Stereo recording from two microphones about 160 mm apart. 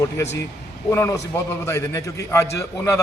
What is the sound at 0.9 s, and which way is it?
A man's voice, 15° left (ahead or behind).